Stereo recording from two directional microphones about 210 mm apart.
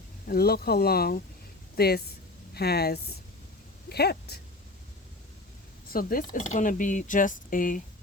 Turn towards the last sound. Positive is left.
turn(degrees=40)  # may be behind; listen again after turning